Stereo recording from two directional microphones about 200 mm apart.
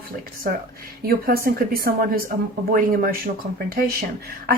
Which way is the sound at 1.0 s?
50° right (ahead or behind).